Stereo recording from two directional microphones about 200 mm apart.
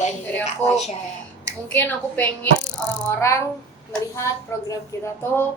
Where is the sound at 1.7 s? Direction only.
10° left (ahead or behind).